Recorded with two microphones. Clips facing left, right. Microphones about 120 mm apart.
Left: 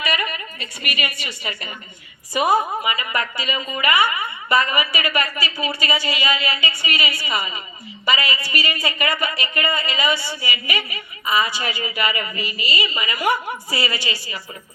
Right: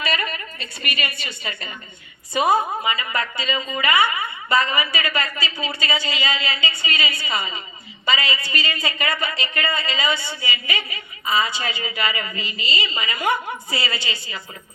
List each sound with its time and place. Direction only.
0.6 s a woman's voice: 30° right (ahead or behind)